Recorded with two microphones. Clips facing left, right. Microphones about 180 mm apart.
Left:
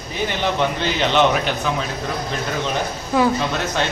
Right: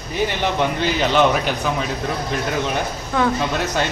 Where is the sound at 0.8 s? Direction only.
10° right (ahead or behind).